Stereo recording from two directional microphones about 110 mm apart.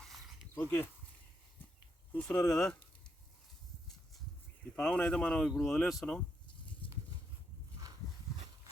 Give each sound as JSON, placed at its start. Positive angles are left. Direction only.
{"t": 0.0, "sound": "a sound", "side_deg": 0}
{"t": 0.5, "sound": "speech", "side_deg": 20}
{"t": 2.1, "sound": "speech", "side_deg": 10}
{"t": 4.7, "sound": "speech", "side_deg": 10}